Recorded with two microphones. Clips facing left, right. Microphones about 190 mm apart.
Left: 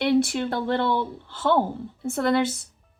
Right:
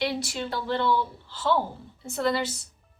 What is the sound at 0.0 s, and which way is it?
Speech, 55° left (ahead or behind).